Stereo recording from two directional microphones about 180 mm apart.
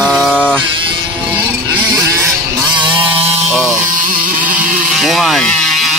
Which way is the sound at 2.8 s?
25° right (ahead or behind).